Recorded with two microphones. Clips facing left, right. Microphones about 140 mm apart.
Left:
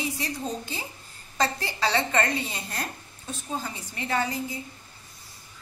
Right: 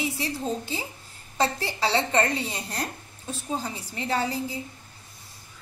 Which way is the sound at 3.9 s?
30° right (ahead or behind).